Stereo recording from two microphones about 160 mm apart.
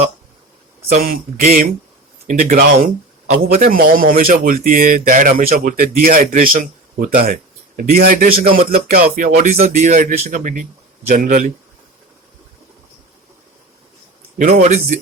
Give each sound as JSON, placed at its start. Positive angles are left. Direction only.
{"t": 0.8, "sound": "speech", "side_deg": -45}
{"t": 1.0, "sound": "speech", "side_deg": -65}
{"t": 9.8, "sound": "a man's voice", "side_deg": -50}
{"t": 14.5, "sound": "a man's voice", "side_deg": -45}